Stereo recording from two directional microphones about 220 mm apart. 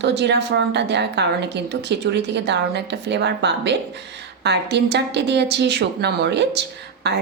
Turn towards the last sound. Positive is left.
turn(degrees=-50)  # may be behind; listen again after turning